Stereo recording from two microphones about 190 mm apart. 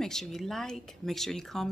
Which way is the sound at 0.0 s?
Centre (ahead or behind).